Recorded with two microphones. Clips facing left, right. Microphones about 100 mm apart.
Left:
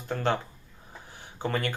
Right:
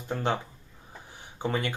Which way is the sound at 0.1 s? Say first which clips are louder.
Left 1 dB; 15° right (ahead or behind).